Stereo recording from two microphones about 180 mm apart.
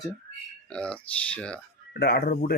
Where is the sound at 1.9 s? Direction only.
65° left (ahead or behind).